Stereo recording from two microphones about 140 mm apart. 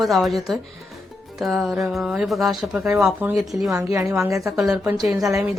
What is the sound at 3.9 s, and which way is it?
Speech, 20° right (ahead or behind).